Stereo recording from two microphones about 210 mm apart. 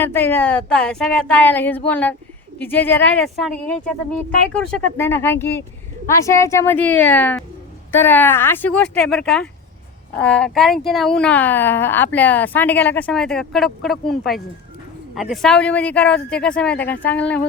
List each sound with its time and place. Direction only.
0.0 s speech: 10° left (ahead or behind)